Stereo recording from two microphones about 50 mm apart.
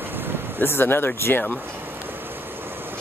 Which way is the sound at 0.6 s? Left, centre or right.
Left.